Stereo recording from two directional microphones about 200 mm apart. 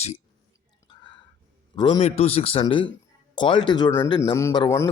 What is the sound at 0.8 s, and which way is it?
Whispering, 20° left (ahead or behind).